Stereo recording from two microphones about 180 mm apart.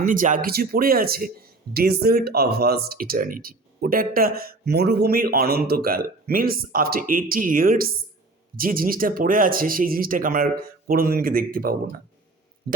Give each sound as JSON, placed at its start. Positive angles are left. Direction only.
{"t": 0.0, "sound": "speech", "side_deg": -50}